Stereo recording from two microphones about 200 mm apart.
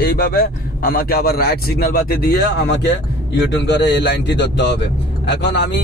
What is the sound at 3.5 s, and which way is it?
A man's voice, 60° left (ahead or behind).